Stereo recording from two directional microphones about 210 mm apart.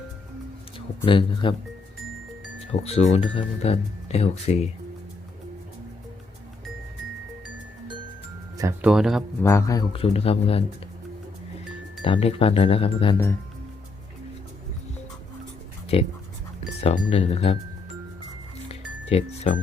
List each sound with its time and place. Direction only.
1.0 s speech: 25° left (ahead or behind)
2.8 s speech: 30° left (ahead or behind)
8.8 s speech: centre (ahead or behind)
9.4 s speech: 15° left (ahead or behind)
12.0 s speech: 25° left (ahead or behind)
15.9 s speech: 25° left (ahead or behind)
18.7 s music: 30° left (ahead or behind)